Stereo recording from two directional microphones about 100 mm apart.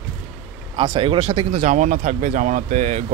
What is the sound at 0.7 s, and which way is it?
Speech, 45° right (ahead or behind).